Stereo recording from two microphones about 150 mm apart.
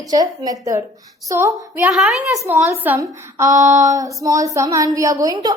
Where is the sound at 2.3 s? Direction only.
15° right (ahead or behind).